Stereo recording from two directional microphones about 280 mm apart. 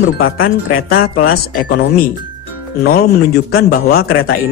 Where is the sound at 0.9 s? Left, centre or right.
Left.